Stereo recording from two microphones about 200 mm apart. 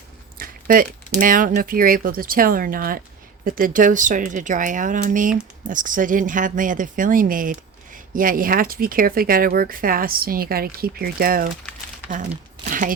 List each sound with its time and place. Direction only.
0.3 s speech: 45° right (ahead or behind)
12.1 s crumpling: 40° right (ahead or behind)